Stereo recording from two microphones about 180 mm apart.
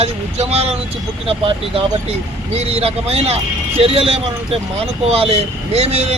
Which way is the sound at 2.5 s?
35° right (ahead or behind).